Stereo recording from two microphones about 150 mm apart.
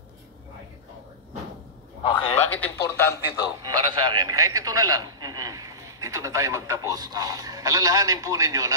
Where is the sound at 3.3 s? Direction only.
25° right (ahead or behind).